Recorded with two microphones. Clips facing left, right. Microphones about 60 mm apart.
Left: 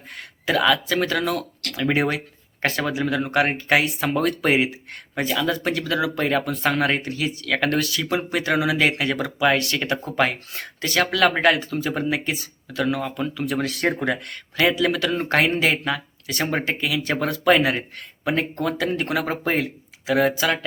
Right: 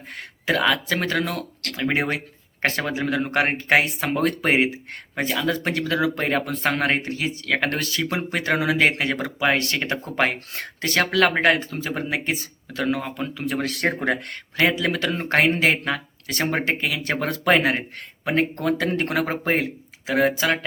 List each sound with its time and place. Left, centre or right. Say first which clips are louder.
0.2 s speech: left 1 dB; right